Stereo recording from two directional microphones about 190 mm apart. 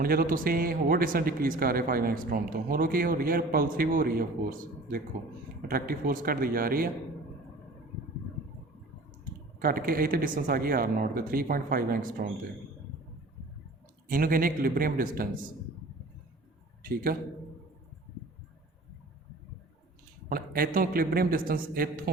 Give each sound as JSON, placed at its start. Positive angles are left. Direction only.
{"t": 0.0, "sound": "a man's voice", "side_deg": -50}
{"t": 9.6, "sound": "a man's voice", "side_deg": -50}
{"t": 14.1, "sound": "a man's voice", "side_deg": -50}
{"t": 16.8, "sound": "a man's voice", "side_deg": -50}
{"t": 20.3, "sound": "a man's voice", "side_deg": -50}